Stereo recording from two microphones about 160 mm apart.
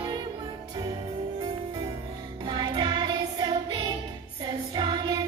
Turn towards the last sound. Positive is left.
turn(degrees=-25)  # may be behind; listen again after turning